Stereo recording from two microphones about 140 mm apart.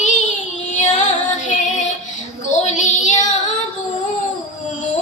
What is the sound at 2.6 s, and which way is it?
Child singing, 60° left (ahead or behind).